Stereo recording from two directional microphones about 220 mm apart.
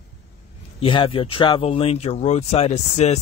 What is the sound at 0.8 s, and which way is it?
Speech, 25° left (ahead or behind).